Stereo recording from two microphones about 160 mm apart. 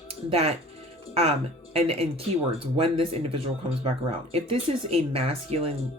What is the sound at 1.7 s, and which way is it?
Speech, 35° right (ahead or behind).